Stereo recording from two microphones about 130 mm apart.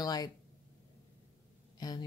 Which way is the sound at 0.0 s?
30° left (ahead or behind).